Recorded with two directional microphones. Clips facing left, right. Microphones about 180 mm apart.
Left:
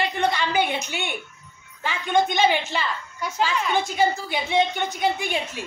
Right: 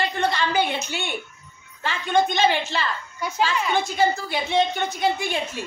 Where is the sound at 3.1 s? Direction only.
Centre (ahead or behind).